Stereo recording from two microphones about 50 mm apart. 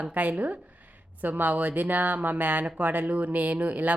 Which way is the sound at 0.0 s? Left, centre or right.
Right.